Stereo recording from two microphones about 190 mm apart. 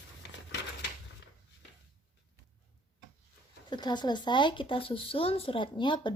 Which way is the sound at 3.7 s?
20° left (ahead or behind).